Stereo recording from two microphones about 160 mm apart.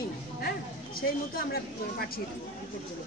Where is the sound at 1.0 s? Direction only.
65° left (ahead or behind).